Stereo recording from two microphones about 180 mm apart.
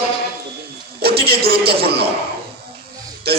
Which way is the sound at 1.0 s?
60° right (ahead or behind).